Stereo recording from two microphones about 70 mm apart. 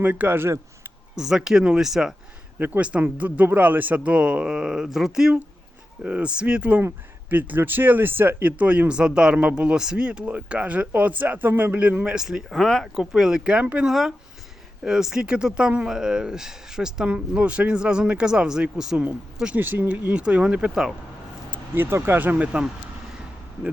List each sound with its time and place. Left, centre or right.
0.0 s speech: right
1.1 s speech: centre
2.6 s speech: right
12.1 s speech: centre
12.5 s speech: centre
13.0 s speech: centre
19.5 s speech: right; by 20.9 s centre
21.5 s speech: right